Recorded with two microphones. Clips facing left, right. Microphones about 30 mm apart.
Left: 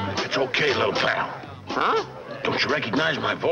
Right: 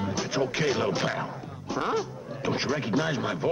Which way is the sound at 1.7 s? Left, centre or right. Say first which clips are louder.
Left 6 dB; left.